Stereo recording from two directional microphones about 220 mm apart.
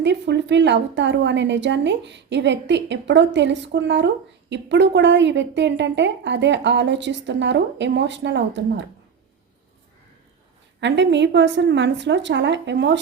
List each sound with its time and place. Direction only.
0.0 s a woman's voice: 50° right (ahead or behind)
10.8 s a woman's voice: 55° right (ahead or behind)